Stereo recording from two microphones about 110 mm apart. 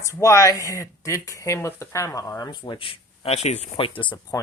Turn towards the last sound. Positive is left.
turn(degrees=45)  # may be behind; listen again after turning